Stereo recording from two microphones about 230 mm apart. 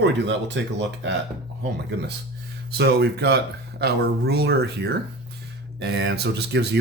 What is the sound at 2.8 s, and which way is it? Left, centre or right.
Speech, right.